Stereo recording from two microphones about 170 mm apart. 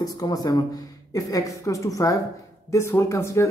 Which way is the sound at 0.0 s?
20° left (ahead or behind).